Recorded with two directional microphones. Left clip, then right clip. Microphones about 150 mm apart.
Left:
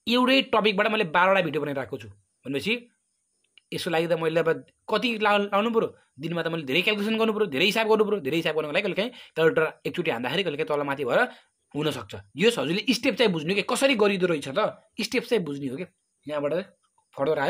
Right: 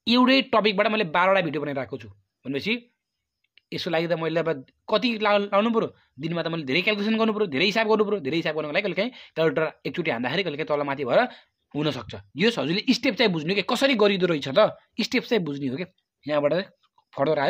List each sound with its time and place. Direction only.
0.0 s speech: 30° right (ahead or behind)